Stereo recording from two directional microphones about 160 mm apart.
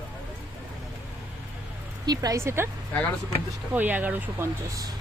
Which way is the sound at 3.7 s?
10° right (ahead or behind).